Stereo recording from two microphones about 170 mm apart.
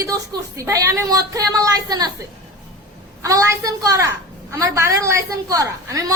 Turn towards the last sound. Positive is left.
turn(degrees=-20)  # may be behind; listen again after turning